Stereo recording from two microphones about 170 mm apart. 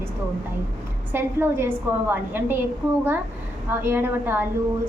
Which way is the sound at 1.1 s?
15° right (ahead or behind).